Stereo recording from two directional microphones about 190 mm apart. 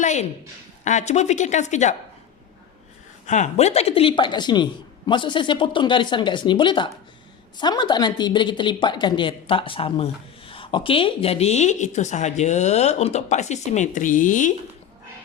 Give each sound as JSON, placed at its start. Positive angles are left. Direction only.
{"t": 0.0, "sound": "a sound", "side_deg": 40}
{"t": 0.9, "sound": "a woman's voice", "side_deg": 40}
{"t": 3.2, "sound": "a woman's voice", "side_deg": 40}